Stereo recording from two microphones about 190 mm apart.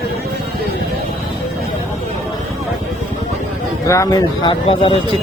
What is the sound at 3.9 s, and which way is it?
Speech, 15° left (ahead or behind).